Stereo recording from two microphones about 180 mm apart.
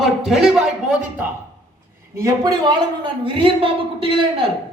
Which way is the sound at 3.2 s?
30° right (ahead or behind).